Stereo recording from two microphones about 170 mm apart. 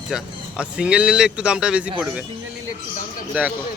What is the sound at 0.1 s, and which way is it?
Speech, 5° right (ahead or behind).